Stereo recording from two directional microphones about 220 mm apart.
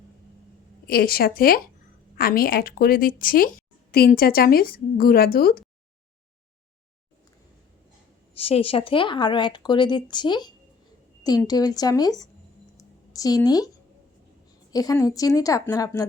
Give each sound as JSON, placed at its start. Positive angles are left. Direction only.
{"t": 0.9, "sound": "a woman's voice", "side_deg": 45}
{"t": 8.4, "sound": "a woman's voice", "side_deg": 25}
{"t": 12.7, "sound": "a sound", "side_deg": 15}
{"t": 14.7, "sound": "a woman's voice", "side_deg": 15}